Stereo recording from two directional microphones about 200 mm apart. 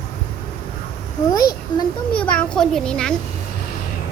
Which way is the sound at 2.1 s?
5° left (ahead or behind).